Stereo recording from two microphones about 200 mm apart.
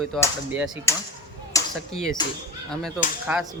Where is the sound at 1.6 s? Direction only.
15° left (ahead or behind).